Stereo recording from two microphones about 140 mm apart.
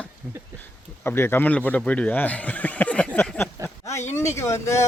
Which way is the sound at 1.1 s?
15° left (ahead or behind).